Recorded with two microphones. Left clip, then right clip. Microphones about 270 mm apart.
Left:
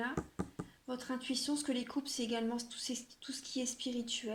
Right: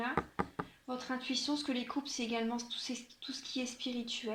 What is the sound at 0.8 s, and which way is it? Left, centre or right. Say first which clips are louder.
Speech: even; left.